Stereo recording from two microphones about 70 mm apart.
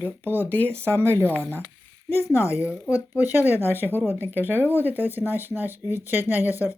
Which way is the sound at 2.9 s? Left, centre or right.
Right.